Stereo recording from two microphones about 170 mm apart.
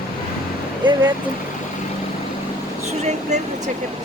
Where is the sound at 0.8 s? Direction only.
25° right (ahead or behind).